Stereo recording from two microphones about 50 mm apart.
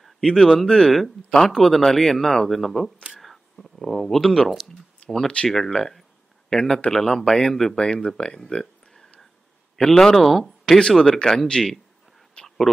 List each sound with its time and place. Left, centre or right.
0.0 s speech: centre
5.5 s speech: centre
10.8 s speech: centre
12.4 s a sound: centre